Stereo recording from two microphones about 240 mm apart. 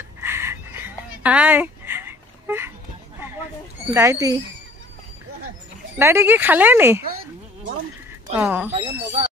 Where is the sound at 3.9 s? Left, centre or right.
Centre.